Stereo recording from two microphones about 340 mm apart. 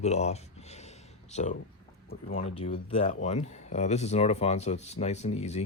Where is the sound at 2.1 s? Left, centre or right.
Left.